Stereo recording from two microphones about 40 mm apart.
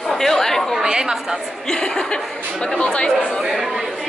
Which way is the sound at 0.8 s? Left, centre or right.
Centre.